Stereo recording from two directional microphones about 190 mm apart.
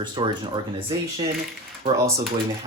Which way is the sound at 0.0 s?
25° right (ahead or behind).